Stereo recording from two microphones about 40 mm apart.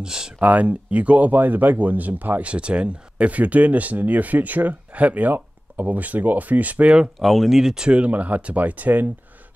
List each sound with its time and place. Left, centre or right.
0.0 s speech: centre
0.4 s speech: right
2.4 s speech: right
7.2 s speech: centre
7.9 s speech: right